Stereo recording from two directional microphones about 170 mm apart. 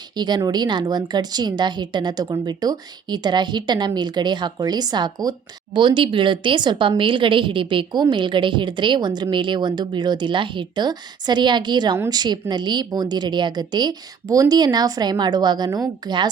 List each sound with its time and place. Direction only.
0.2 s a woman's voice: 25° right (ahead or behind)